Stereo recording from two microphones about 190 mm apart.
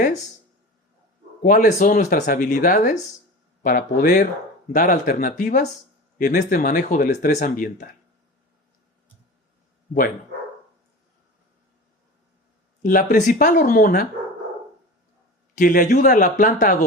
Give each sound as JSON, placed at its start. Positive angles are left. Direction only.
{"t": 1.4, "sound": "speech", "side_deg": 45}
{"t": 12.8, "sound": "speech", "side_deg": 45}
{"t": 15.5, "sound": "speech", "side_deg": 45}